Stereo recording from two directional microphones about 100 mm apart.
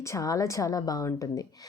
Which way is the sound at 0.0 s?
30° left (ahead or behind).